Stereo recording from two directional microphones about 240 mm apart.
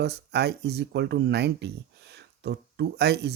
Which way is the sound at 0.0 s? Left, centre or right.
Right.